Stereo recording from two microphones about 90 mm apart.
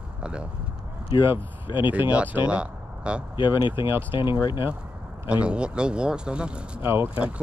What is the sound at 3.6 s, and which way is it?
Speech, 65° left (ahead or behind).